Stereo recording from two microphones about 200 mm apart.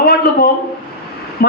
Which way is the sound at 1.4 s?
50° left (ahead or behind).